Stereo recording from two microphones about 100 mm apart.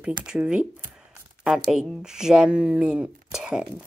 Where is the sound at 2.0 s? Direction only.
5° right (ahead or behind).